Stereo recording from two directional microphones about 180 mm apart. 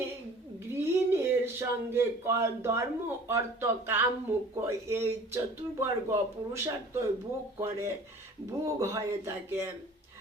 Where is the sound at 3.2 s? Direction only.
15° right (ahead or behind).